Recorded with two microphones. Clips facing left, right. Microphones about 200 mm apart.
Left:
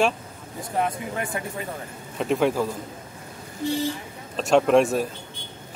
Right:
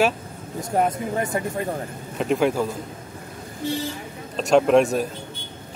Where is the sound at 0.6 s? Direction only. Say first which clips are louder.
Right 4 dB; 40° right (ahead or behind).